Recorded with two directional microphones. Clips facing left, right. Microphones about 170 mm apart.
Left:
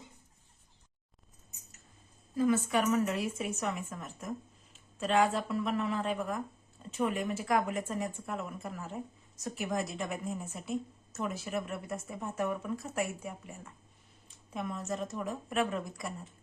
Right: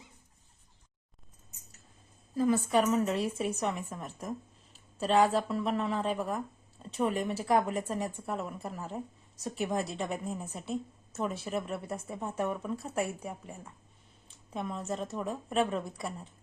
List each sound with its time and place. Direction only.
2.3 s a woman's voice: 30° right (ahead or behind)